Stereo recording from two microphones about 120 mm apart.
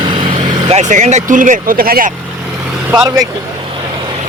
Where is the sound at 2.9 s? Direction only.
5° right (ahead or behind).